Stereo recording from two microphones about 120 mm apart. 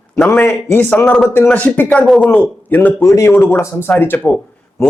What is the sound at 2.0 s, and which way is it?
A man's voice, centre (ahead or behind).